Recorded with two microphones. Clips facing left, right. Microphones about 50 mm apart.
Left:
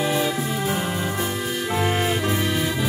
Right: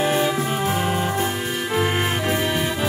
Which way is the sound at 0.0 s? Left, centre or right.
Right.